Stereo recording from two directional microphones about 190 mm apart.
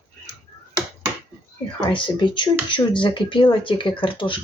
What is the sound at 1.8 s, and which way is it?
Speech, 25° left (ahead or behind).